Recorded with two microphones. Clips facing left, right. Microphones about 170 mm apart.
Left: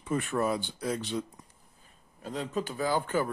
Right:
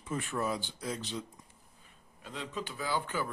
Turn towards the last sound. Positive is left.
turn(degrees=50)  # may be behind; listen again after turning